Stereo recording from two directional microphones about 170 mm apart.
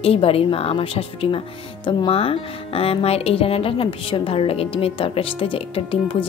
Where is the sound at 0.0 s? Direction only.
35° left (ahead or behind).